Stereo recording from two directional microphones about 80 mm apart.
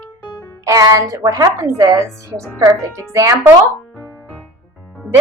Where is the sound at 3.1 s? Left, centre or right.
Right.